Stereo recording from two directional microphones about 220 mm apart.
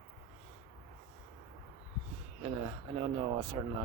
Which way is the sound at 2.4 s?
25° right (ahead or behind).